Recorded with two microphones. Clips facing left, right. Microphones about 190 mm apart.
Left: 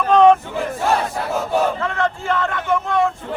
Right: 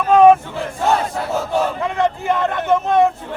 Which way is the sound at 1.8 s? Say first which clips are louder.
Right 3 dB; 15° right (ahead or behind).